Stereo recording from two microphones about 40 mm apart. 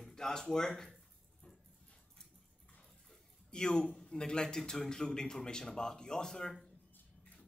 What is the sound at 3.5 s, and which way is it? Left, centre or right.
A man's voice, centre.